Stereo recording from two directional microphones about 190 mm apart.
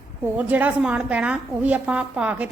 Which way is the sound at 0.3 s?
10° right (ahead or behind).